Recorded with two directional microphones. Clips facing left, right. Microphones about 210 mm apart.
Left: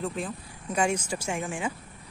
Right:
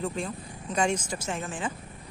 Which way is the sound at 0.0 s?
Centre (ahead or behind).